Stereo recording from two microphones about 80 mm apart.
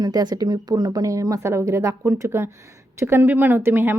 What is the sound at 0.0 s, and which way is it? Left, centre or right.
Speech, right.